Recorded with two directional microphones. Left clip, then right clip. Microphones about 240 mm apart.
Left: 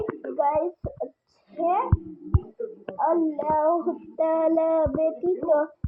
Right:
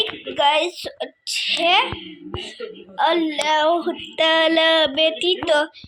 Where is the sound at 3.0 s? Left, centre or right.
Right.